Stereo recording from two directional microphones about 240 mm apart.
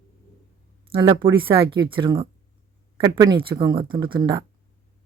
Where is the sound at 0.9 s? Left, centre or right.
Right.